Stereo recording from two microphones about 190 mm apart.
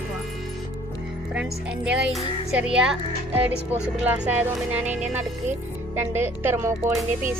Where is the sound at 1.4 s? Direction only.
5° right (ahead or behind).